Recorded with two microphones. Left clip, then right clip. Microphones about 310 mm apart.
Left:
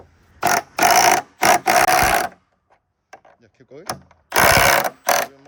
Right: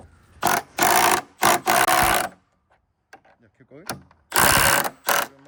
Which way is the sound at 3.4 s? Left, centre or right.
Left.